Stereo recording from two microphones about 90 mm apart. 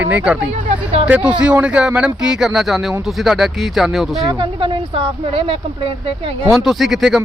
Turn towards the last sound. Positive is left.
turn(degrees=0)  # may be behind; listen again after turning